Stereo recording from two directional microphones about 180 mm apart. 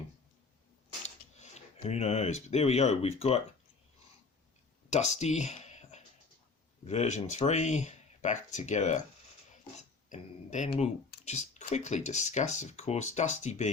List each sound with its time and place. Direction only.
1.0 s speech: 40° left (ahead or behind)
4.9 s speech: 40° left (ahead or behind)
10.1 s speech: 40° left (ahead or behind)